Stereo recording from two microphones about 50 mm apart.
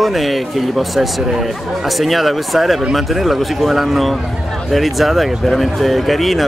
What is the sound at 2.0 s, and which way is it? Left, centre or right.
Speech, centre.